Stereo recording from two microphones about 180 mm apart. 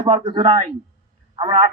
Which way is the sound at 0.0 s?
25° right (ahead or behind).